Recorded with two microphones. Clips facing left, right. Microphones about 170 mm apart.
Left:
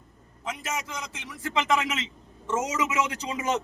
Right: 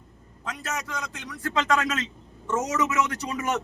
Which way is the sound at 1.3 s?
10° left (ahead or behind).